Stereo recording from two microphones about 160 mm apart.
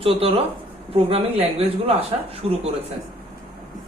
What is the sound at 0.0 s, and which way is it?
A woman's voice, 35° right (ahead or behind).